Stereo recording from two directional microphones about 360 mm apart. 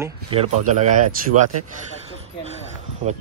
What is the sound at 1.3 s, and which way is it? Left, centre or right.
Speech, right.